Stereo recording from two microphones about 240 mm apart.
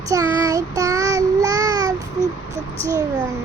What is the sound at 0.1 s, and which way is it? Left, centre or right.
Child singing, centre.